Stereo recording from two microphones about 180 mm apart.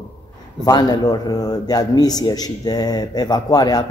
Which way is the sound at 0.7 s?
20° left (ahead or behind).